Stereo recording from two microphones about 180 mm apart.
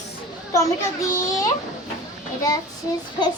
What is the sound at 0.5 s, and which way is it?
A child's voice, 15° left (ahead or behind).